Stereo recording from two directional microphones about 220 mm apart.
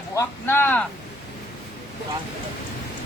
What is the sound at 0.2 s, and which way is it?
Speech, 10° left (ahead or behind).